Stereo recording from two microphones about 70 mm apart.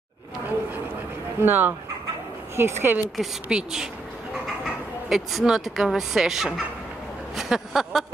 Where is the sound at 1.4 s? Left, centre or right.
Right.